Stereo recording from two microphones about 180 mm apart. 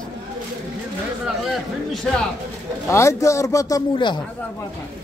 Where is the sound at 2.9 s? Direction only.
15° left (ahead or behind).